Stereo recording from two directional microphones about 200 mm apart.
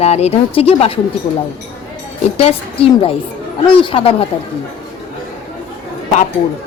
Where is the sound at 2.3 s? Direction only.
30° left (ahead or behind).